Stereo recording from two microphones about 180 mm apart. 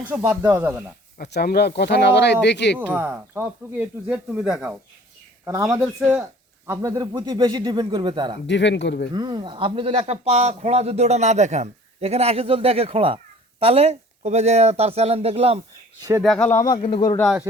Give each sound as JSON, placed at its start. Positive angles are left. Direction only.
{"t": 0.0, "sound": "speech", "side_deg": -10}
{"t": 1.2, "sound": "speech", "side_deg": 60}
{"t": 2.7, "sound": "speech", "side_deg": -10}
{"t": 5.7, "sound": "speech", "side_deg": -15}
{"t": 8.4, "sound": "speech", "side_deg": 80}
{"t": 9.1, "sound": "a man's voice", "side_deg": -25}
{"t": 16.2, "sound": "speech", "side_deg": 0}
{"t": 16.9, "sound": "speech", "side_deg": 20}